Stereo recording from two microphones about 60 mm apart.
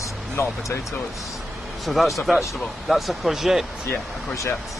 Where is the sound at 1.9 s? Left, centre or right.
Centre.